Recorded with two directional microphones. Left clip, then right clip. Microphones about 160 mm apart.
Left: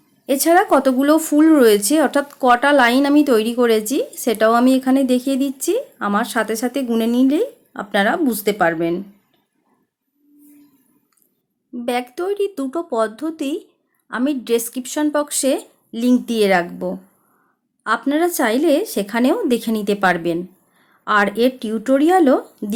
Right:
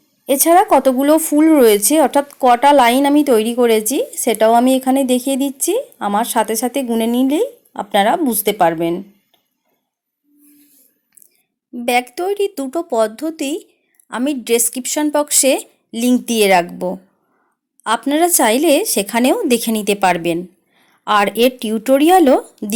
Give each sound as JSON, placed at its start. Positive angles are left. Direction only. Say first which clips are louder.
{"t": 0.3, "sound": "speech", "louder": "right 3 dB", "side_deg": -15}
{"t": 11.7, "sound": "speech", "louder": "right 6 dB", "side_deg": -15}